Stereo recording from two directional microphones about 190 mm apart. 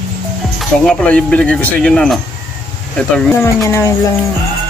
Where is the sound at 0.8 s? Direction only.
5° left (ahead or behind).